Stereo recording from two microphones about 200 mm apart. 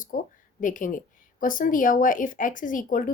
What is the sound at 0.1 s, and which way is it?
Speech, 45° left (ahead or behind).